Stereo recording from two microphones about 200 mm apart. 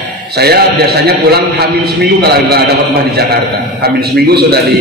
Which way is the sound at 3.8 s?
50° right (ahead or behind).